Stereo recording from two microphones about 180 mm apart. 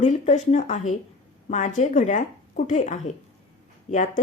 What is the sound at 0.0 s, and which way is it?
A woman's voice, 40° left (ahead or behind).